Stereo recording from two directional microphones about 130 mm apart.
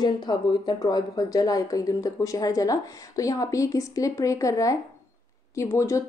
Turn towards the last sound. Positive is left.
turn(degrees=20)  # may be behind; listen again after turning